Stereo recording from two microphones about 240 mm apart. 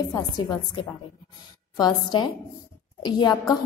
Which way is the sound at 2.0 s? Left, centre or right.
Centre.